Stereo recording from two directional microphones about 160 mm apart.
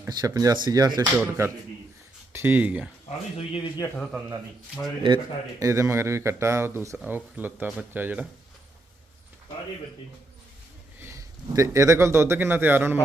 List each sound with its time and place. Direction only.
0.1 s a man's voice: 20° right (ahead or behind)
3.3 s speech: 35° left (ahead or behind)
5.0 s a man's voice: 25° right (ahead or behind)
11.0 s speech: 20° right (ahead or behind)